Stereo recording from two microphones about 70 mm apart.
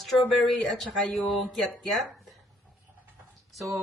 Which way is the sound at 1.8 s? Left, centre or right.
Centre.